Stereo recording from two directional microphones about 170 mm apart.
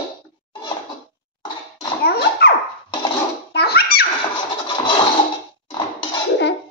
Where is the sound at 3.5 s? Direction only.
70° left (ahead or behind).